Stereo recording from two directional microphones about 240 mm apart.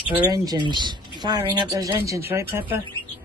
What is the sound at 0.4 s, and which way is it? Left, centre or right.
Speech, centre.